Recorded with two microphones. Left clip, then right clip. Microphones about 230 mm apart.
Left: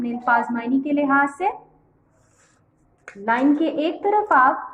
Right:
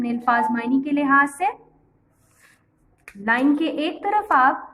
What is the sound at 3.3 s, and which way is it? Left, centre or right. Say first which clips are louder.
A woman's voice: left 1 dB; right.